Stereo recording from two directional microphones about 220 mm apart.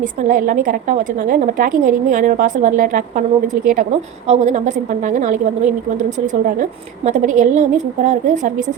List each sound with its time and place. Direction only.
0.0 s a woman's voice: 35° right (ahead or behind)